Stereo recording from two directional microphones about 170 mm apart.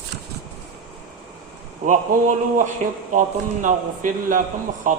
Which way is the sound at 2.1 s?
55° right (ahead or behind).